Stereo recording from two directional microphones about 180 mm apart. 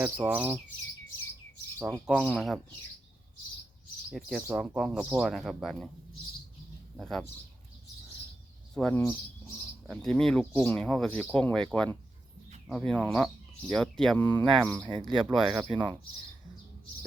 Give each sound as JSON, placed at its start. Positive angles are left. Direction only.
{"t": 0.0, "sound": "speech", "side_deg": -10}
{"t": 2.0, "sound": "speech", "side_deg": 5}
{"t": 4.1, "sound": "speech", "side_deg": -5}
{"t": 6.9, "sound": "speech", "side_deg": 0}
{"t": 8.7, "sound": "speech", "side_deg": 5}
{"t": 15.6, "sound": "speech", "side_deg": -25}